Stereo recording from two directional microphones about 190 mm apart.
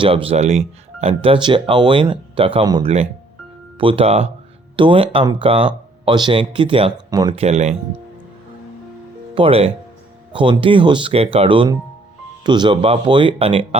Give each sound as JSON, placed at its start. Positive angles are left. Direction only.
{"t": 0.0, "sound": "speech", "side_deg": -30}
{"t": 7.3, "sound": "speech", "side_deg": -35}
{"t": 9.3, "sound": "speech", "side_deg": -30}